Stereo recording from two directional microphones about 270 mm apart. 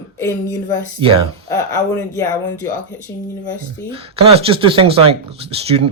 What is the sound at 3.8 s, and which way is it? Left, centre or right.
Speech, right.